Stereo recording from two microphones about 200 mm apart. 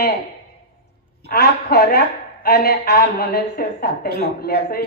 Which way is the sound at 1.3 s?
55° left (ahead or behind).